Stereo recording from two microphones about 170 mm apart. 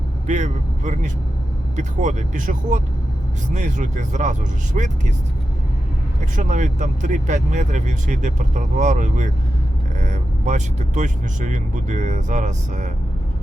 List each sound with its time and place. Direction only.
0.3 s speech: 45° right (ahead or behind)
6.3 s speech: 50° right (ahead or behind)